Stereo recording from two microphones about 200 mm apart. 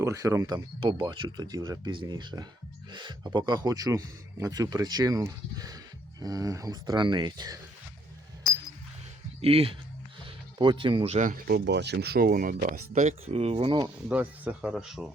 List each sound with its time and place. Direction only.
0.0 s speech: 15° right (ahead or behind)
9.4 s speech: 30° right (ahead or behind); by 12.6 s 45° right (ahead or behind)
12.9 s speech: 35° right (ahead or behind)
14.1 s speech: 10° right (ahead or behind)